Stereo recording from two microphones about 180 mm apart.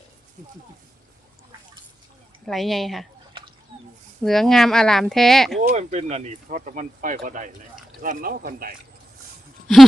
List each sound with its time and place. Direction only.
2.5 s speech: centre (ahead or behind)
4.2 s speech: centre (ahead or behind)
5.7 s speech: 40° right (ahead or behind)